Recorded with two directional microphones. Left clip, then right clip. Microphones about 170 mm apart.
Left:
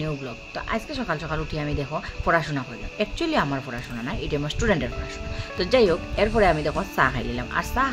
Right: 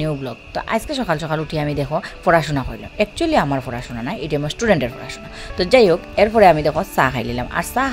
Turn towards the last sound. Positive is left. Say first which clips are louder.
# right 4 dB
turn(degrees=-40)  # may be behind; listen again after turning